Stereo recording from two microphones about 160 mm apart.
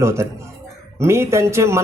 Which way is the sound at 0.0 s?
15° right (ahead or behind).